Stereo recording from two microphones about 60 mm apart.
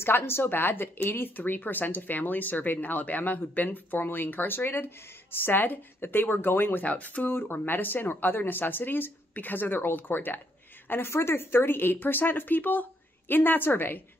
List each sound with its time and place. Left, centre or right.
0.0 s speech: left
7.2 s speech: left